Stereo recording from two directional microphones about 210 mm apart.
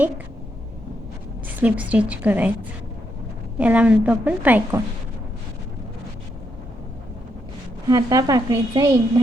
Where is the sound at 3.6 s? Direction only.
5° right (ahead or behind).